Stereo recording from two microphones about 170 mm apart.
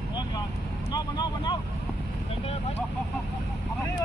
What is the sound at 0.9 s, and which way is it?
Vehicle, 25° left (ahead or behind).